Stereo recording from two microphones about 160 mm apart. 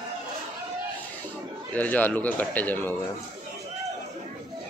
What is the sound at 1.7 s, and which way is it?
A man's voice, 10° left (ahead or behind).